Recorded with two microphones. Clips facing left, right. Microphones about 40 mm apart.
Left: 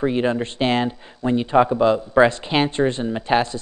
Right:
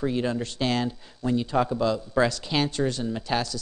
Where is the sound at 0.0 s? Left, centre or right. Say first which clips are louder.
Left 6 dB; left.